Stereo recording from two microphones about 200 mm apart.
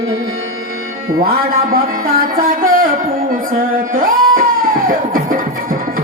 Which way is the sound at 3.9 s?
45° right (ahead or behind).